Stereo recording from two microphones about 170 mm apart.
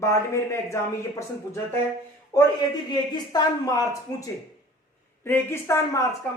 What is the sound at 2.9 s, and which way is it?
Speech, 20° left (ahead or behind).